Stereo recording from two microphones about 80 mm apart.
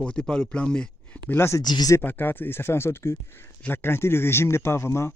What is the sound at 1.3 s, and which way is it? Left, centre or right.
Speech, left.